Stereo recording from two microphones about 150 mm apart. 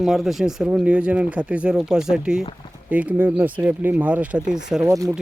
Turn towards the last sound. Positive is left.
turn(degrees=-20)  # may be behind; listen again after turning